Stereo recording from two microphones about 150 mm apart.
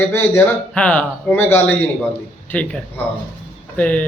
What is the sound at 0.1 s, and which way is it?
Speech, 15° left (ahead or behind).